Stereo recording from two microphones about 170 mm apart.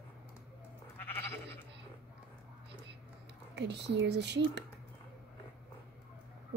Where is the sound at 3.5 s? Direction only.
90° right.